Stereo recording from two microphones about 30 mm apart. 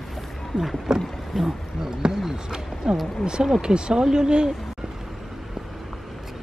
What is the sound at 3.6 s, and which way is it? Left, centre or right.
Speech, right.